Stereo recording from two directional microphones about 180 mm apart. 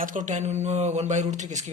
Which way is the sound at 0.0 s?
45° right (ahead or behind).